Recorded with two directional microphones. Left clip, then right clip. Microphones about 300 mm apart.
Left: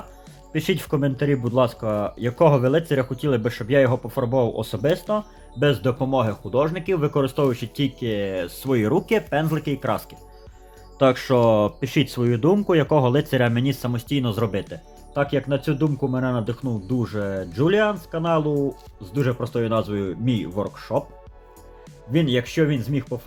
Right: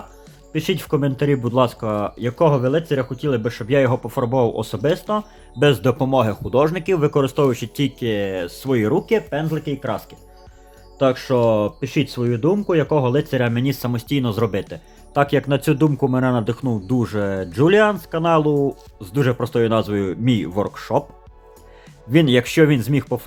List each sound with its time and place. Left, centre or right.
0.5 s speech: centre
22.1 s speech: centre